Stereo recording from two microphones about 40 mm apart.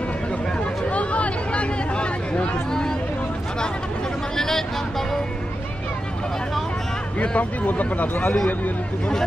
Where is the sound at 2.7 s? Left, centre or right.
Centre.